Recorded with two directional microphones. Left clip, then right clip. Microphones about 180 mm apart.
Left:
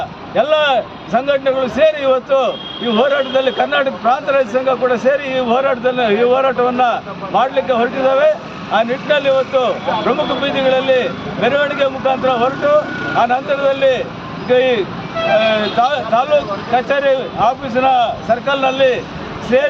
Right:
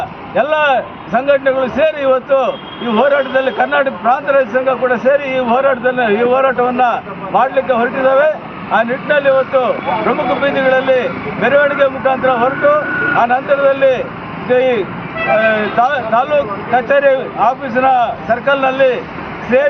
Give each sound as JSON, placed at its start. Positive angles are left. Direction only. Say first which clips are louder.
{"t": 0.3, "sound": "a man's voice", "louder": "right 1 dB", "side_deg": 20}